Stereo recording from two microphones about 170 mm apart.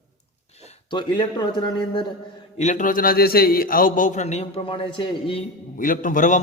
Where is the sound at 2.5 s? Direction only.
45° left (ahead or behind).